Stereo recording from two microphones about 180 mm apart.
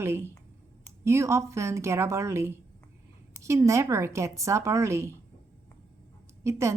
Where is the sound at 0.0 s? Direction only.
15° right (ahead or behind).